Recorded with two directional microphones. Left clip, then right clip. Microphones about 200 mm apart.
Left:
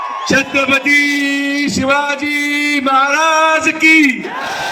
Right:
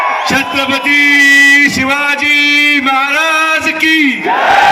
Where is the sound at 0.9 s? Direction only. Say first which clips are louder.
Right 8 dB; 40° right (ahead or behind).